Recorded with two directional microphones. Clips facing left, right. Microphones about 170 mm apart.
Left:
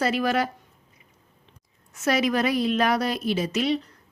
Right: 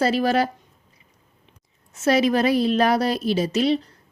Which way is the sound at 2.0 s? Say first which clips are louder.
Right 4 dB; 30° right (ahead or behind).